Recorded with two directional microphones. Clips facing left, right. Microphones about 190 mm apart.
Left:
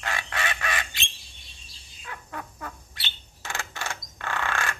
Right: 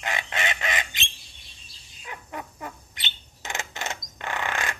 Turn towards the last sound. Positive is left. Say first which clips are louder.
# even
turn(degrees=-20)  # may be behind; listen again after turning